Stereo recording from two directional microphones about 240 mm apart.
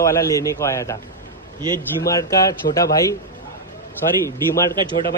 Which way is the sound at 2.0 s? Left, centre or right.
Centre.